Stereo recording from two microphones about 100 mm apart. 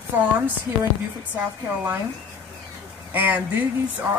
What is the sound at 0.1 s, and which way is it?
Speech, 20° right (ahead or behind).